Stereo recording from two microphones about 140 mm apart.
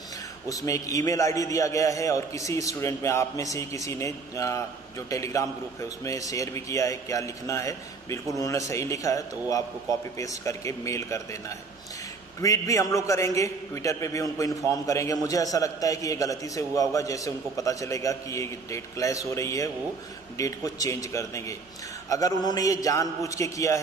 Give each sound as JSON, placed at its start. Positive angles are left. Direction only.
{"t": 0.5, "sound": "a man's voice", "side_deg": 25}